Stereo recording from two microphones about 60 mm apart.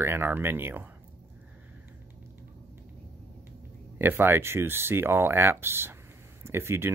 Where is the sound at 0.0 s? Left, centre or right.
Right.